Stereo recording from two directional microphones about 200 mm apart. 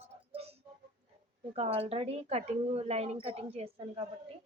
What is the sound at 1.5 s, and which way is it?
A woman's voice, 30° right (ahead or behind).